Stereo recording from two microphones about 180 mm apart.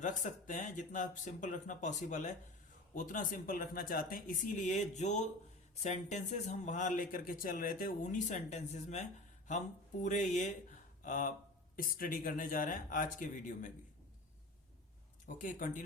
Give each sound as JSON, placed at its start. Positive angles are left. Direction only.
{"t": 0.0, "sound": "speech", "side_deg": 45}
{"t": 15.4, "sound": "speech", "side_deg": 45}